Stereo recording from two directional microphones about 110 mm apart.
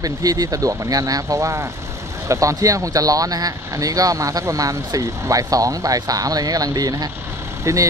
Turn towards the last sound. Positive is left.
turn(degrees=-30)  # may be behind; listen again after turning